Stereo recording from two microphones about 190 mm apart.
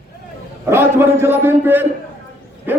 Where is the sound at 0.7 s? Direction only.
10° right (ahead or behind).